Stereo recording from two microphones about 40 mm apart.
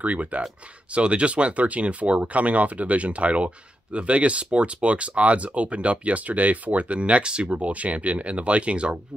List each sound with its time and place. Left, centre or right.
0.0 s speech: right
7.5 s speech: right